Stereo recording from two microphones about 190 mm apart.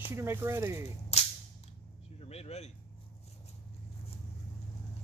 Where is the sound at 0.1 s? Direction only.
15° right (ahead or behind).